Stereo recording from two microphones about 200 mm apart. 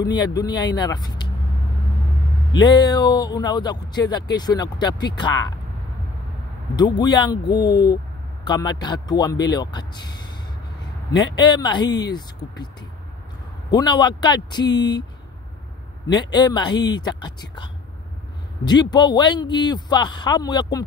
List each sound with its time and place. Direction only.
0.0 s speech: 20° left (ahead or behind)
2.5 s speech: 20° left (ahead or behind)
6.7 s speech: 20° left (ahead or behind)
11.3 s speech: 20° left (ahead or behind)
13.7 s speech: 20° left (ahead or behind)
16.1 s speech: 20° left (ahead or behind)